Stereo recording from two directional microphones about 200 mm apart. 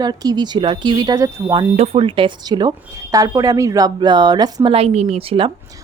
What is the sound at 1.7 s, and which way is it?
Speech, 30° right (ahead or behind).